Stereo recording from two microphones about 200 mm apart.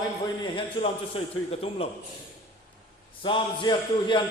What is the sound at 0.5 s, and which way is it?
A man's voice, 30° left (ahead or behind).